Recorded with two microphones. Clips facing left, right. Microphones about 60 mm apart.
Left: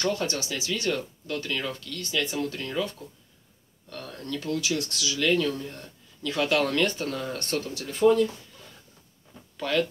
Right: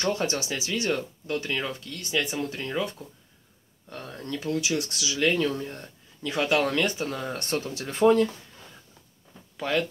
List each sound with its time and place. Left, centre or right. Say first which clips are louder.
0.0 s speech: right 1 dB; right
7.5 s speech: right 2 dB; right
9.6 s speech: left 1 dB; centre